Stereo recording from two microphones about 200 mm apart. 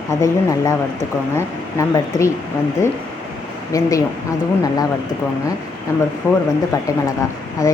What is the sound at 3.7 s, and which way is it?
Speech, 15° left (ahead or behind).